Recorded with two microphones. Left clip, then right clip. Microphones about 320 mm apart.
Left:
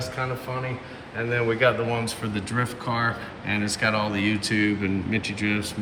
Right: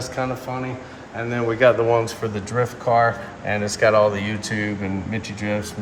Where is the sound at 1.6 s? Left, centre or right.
Right.